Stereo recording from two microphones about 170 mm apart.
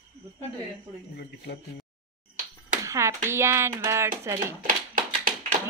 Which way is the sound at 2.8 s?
15° right (ahead or behind).